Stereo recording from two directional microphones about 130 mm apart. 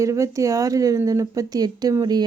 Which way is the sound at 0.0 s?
25° right (ahead or behind).